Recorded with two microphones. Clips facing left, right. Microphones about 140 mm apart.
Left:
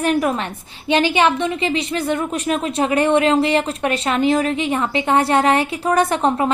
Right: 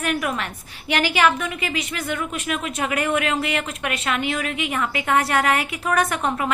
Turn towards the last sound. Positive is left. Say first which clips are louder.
# left 5 dB
turn(degrees=30)  # may be behind; listen again after turning